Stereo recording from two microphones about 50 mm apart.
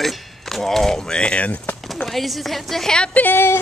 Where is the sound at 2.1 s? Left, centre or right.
Centre.